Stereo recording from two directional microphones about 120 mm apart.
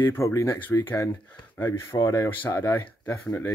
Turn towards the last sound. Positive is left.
turn(degrees=15)  # may be behind; listen again after turning